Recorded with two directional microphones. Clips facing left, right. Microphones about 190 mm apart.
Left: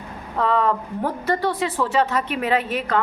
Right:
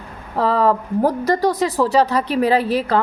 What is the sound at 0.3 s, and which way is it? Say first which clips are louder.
Speech: right 4 dB; 35° right (ahead or behind).